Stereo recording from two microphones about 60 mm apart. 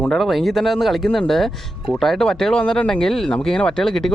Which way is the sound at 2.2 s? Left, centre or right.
Centre.